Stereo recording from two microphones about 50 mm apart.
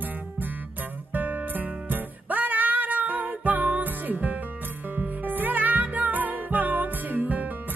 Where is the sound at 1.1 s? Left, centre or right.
Right.